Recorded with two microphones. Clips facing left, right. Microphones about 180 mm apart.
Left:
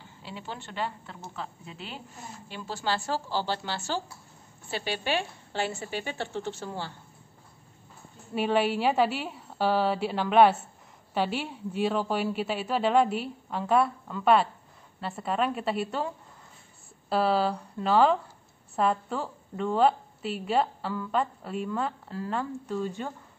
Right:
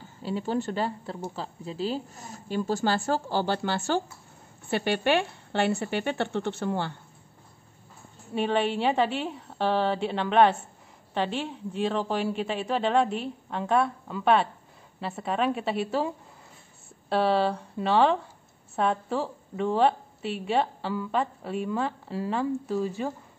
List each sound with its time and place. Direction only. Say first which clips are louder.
0.0 s a woman's voice: right 10 dB; 40° right (ahead or behind); by 6.9 s 60° right (ahead or behind)
8.4 s a woman's voice: even; 5° left (ahead or behind)
17.1 s a woman's voice: right 1 dB; centre (ahead or behind)